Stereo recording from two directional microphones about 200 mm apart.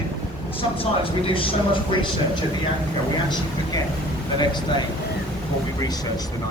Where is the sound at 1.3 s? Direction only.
25° left (ahead or behind).